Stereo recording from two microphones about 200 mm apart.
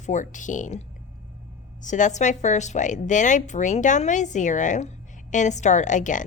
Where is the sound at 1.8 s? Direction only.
40° left (ahead or behind).